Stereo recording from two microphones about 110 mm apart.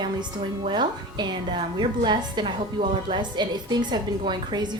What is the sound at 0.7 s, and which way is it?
A woman's voice, 45° right (ahead or behind).